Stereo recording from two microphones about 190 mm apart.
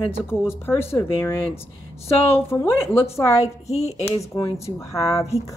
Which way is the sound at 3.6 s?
35° left (ahead or behind).